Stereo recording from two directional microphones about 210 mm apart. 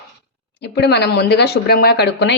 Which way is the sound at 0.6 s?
50° left (ahead or behind).